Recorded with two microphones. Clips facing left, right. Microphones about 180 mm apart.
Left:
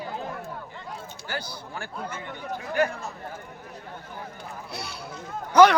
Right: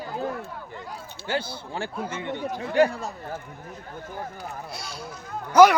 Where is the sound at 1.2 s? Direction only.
25° right (ahead or behind).